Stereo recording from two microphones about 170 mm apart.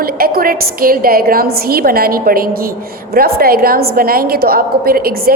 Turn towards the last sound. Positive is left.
turn(degrees=-60)  # may be behind; listen again after turning